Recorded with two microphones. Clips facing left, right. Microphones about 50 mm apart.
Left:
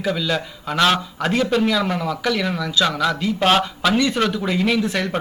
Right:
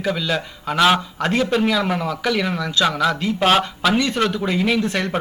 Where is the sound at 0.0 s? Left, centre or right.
Centre.